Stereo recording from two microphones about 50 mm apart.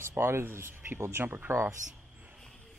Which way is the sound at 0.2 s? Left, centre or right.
Right.